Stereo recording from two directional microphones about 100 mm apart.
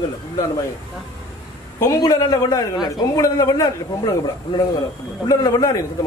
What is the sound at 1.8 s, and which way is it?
A man's voice, 35° left (ahead or behind).